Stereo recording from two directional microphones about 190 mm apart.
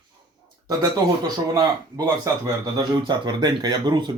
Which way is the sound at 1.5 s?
20° right (ahead or behind).